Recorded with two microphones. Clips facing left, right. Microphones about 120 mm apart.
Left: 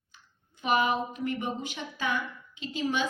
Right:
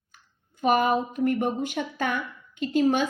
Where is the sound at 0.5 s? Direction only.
45° right (ahead or behind).